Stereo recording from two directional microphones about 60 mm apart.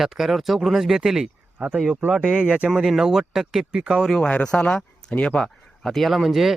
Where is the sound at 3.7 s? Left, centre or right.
Centre.